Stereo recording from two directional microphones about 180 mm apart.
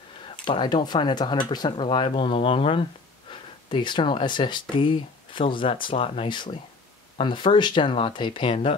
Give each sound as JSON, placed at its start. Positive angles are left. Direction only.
{"t": 0.5, "sound": "speech", "side_deg": 25}